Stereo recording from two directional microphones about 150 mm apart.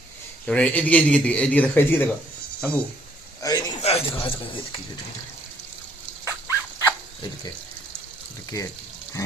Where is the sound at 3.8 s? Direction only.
40° left (ahead or behind).